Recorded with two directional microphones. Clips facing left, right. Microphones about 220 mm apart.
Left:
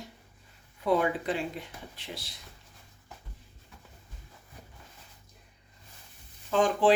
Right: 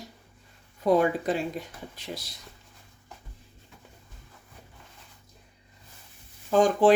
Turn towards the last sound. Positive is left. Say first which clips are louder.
# right 4 dB
turn(degrees=-40)  # may be behind; listen again after turning